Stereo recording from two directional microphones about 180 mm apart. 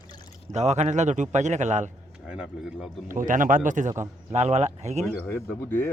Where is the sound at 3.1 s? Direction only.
45° right (ahead or behind).